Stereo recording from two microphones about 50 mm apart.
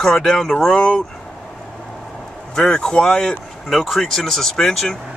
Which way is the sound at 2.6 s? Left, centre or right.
Centre.